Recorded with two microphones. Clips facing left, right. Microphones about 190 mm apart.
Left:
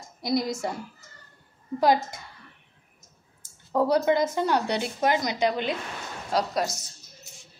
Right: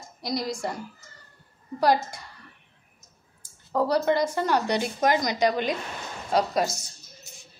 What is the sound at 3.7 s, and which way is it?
A woman's voice, 15° left (ahead or behind).